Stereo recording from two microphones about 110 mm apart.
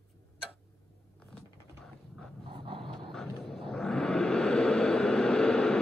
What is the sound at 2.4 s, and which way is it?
Dog, 50° right (ahead or behind).